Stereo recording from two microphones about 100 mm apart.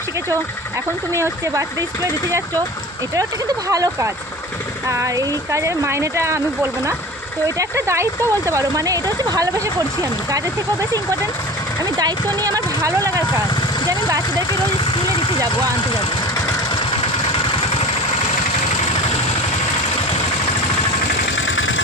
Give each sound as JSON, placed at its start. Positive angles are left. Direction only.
{"t": 1.1, "sound": "speech", "side_deg": -30}
{"t": 3.7, "sound": "speech", "side_deg": -35}